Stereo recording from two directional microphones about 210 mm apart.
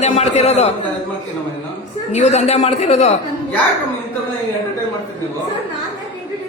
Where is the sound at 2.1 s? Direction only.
35° left (ahead or behind).